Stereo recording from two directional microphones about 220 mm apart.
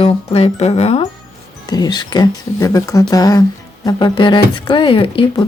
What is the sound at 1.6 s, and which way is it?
Speech, 15° left (ahead or behind).